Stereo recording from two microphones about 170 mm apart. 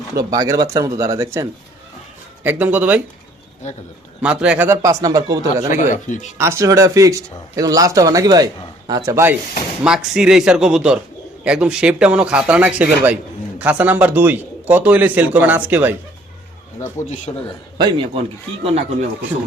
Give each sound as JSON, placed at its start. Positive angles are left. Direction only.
{"t": 0.3, "sound": "a man's voice", "side_deg": -20}
{"t": 4.2, "sound": "a man's voice", "side_deg": -5}
{"t": 5.6, "sound": "speech", "side_deg": 45}
{"t": 6.3, "sound": "a man's voice", "side_deg": -15}
{"t": 9.8, "sound": "a man's voice", "side_deg": -5}
{"t": 17.3, "sound": "a man's voice", "side_deg": 25}
{"t": 17.7, "sound": "a man's voice", "side_deg": -30}